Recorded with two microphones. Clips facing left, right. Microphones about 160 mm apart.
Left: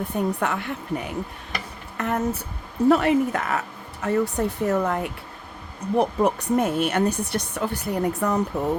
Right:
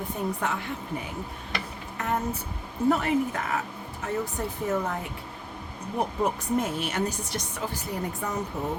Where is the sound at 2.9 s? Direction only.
75° left (ahead or behind).